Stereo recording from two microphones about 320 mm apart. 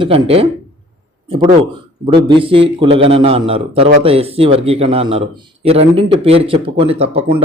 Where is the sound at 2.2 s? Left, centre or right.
Centre.